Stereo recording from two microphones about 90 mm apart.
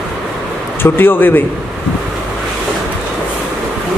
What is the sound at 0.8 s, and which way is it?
Speech, 25° left (ahead or behind).